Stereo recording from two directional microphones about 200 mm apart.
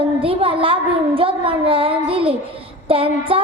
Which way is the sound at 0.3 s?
25° right (ahead or behind).